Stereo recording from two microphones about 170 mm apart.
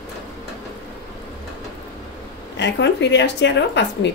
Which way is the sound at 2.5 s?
90° left.